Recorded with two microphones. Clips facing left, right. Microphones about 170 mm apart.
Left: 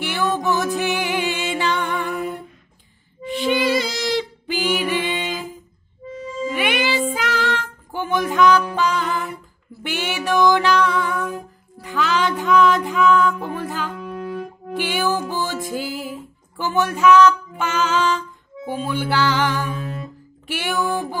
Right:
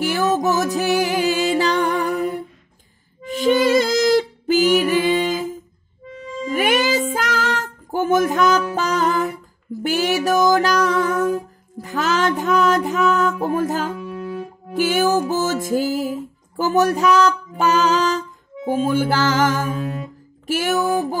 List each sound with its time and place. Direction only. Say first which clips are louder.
0.0 s music: right 4 dB; 40° right (ahead or behind)